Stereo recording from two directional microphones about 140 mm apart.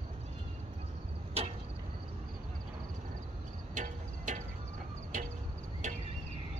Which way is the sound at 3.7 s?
60° right (ahead or behind).